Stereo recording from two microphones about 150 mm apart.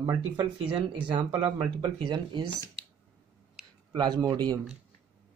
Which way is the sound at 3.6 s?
5° right (ahead or behind).